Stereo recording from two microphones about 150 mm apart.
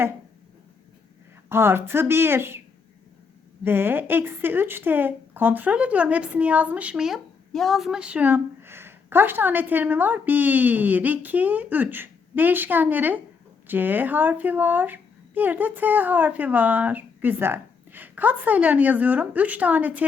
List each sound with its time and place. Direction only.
1.5 s speech: 15° right (ahead or behind)
3.6 s speech: 15° right (ahead or behind)